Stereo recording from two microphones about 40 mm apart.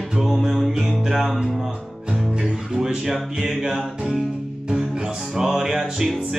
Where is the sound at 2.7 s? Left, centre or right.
Centre.